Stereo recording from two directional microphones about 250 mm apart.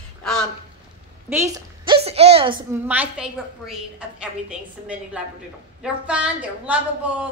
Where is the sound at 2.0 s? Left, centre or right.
Right.